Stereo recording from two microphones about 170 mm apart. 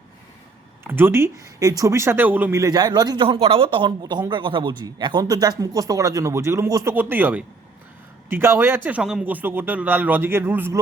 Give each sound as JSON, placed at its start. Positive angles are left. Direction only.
{"t": 0.9, "sound": "a man's voice", "side_deg": -15}